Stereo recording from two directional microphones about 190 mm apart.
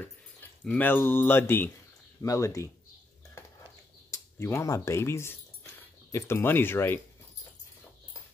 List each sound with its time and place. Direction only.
0.7 s speech: 10° left (ahead or behind)
4.1 s speech: 15° left (ahead or behind)